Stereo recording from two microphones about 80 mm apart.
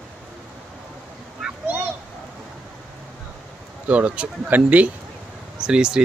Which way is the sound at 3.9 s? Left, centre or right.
Centre.